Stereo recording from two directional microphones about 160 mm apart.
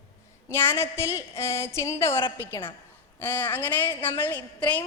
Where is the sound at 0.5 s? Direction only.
15° left (ahead or behind).